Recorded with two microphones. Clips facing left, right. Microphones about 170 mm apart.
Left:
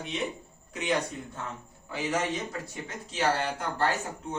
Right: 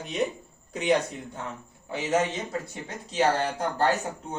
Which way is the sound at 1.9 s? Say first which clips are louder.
Right 4 dB; 25° right (ahead or behind).